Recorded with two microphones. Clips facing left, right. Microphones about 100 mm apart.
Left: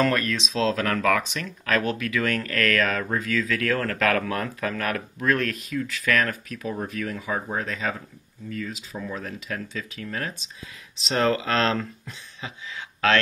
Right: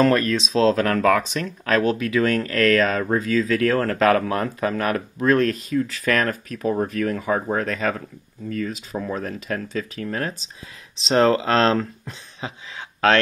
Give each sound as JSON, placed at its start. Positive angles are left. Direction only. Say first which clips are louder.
{"t": 0.0, "sound": "speech", "louder": "right 5 dB", "side_deg": -35}